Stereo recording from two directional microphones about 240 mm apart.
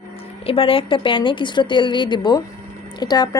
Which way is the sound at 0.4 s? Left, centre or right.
Left.